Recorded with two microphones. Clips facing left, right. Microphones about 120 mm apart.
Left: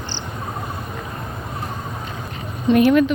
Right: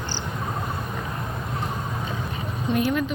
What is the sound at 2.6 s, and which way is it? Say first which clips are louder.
Speech: left 9 dB; 80° left.